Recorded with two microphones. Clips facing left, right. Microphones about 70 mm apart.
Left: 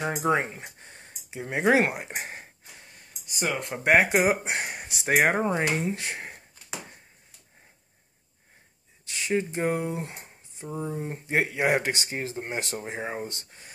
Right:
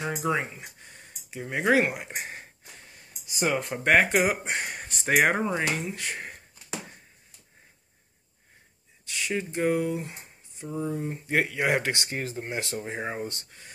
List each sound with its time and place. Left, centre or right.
0.2 s speech: left
3.3 s speech: centre
3.7 s speech: centre
9.1 s speech: left